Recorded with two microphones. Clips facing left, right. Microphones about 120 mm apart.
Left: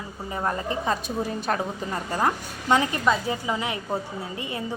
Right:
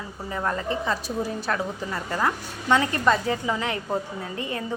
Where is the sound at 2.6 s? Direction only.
15° left (ahead or behind).